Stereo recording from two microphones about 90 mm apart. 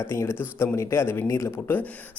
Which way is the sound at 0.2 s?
30° left (ahead or behind).